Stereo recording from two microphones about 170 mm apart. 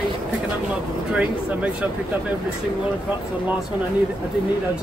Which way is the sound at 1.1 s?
5° right (ahead or behind).